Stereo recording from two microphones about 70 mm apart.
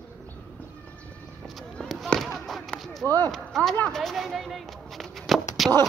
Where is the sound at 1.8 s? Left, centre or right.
Centre.